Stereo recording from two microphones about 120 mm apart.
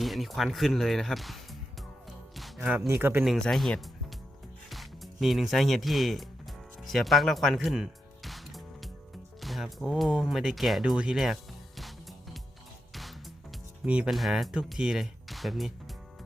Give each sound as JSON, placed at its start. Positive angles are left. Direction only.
{"t": 0.0, "sound": "speech", "side_deg": 0}
{"t": 2.8, "sound": "speech", "side_deg": -20}
{"t": 3.2, "sound": "speech", "side_deg": 0}
{"t": 6.8, "sound": "music", "side_deg": 0}
{"t": 9.4, "sound": "speech", "side_deg": 0}
{"t": 11.8, "sound": "music", "side_deg": 0}
{"t": 13.8, "sound": "speech", "side_deg": -10}